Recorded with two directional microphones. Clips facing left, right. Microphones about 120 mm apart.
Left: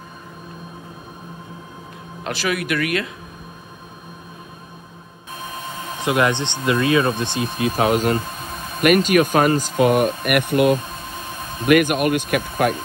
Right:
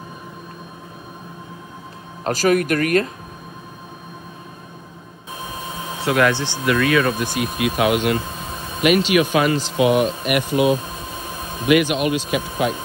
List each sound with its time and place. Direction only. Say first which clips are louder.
2.2 s a man's voice: right 6 dB; 40° right (ahead or behind)
5.9 s speech: right 1 dB; 20° left (ahead or behind); by 10.6 s 55° left (ahead or behind)
11.6 s a man's voice: left 1 dB; 50° left (ahead or behind)